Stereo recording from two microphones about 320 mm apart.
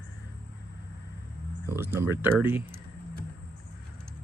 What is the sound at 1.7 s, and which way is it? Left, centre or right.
Speech, centre.